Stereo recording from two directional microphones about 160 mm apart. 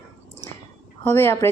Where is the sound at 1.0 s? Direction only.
15° left (ahead or behind).